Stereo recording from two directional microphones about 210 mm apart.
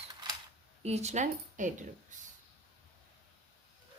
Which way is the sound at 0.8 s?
30° right (ahead or behind).